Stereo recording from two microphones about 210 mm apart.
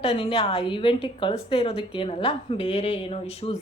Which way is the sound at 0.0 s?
25° left (ahead or behind).